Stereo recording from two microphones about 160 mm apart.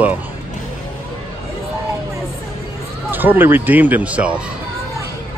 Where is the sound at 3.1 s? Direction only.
10° right (ahead or behind).